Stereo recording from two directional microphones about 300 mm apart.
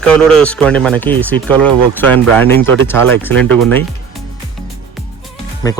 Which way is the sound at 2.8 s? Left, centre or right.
Centre.